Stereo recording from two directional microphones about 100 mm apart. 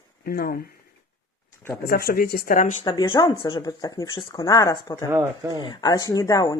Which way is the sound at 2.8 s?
50° left (ahead or behind).